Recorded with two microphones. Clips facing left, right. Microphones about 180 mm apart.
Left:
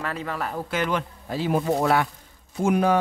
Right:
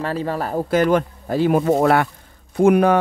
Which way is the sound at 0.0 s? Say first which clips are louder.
Right 6 dB; 35° right (ahead or behind).